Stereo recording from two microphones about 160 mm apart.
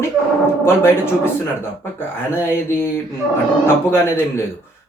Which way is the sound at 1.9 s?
15° left (ahead or behind).